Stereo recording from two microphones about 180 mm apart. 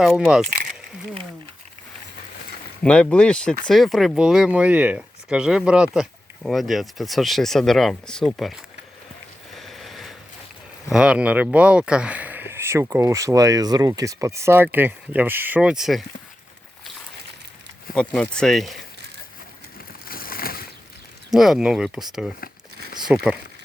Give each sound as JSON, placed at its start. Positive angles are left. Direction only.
{"t": 0.0, "sound": "speech", "side_deg": 0}
{"t": 2.8, "sound": "speech", "side_deg": 5}
{"t": 9.6, "sound": "a sound", "side_deg": 0}
{"t": 10.9, "sound": "speech", "side_deg": -5}
{"t": 17.9, "sound": "speech", "side_deg": 5}
{"t": 20.1, "sound": "a sound", "side_deg": 55}
{"t": 21.3, "sound": "speech", "side_deg": 0}